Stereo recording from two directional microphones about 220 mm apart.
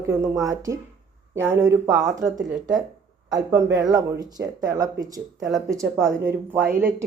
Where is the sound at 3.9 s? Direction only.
15° right (ahead or behind).